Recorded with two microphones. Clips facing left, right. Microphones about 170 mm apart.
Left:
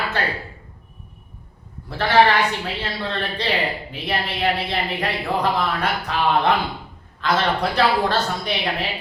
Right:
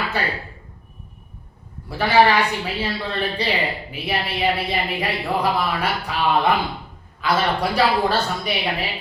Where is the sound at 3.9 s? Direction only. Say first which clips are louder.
Even; 10° right (ahead or behind).